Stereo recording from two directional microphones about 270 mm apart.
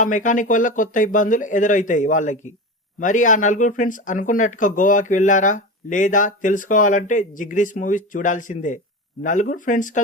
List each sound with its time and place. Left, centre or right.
0.0 s speech: left